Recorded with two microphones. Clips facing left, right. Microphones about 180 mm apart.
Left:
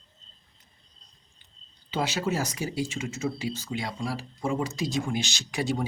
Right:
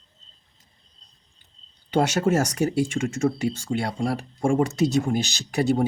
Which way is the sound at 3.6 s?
60° right (ahead or behind).